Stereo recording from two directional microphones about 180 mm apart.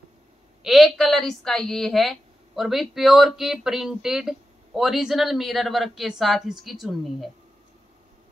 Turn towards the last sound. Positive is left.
turn(degrees=0)  # may be behind; listen again after turning